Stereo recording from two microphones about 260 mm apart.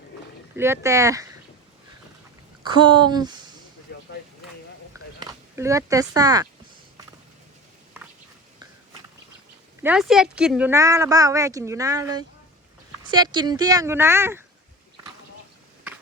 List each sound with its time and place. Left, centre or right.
0.5 s speech: centre
2.6 s speech: centre
5.2 s speech: centre
9.8 s speech: centre